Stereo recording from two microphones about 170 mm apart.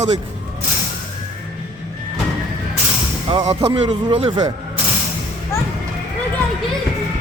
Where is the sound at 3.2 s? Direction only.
35° right (ahead or behind).